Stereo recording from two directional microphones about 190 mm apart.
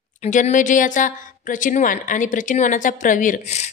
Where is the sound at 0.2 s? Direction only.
40° left (ahead or behind).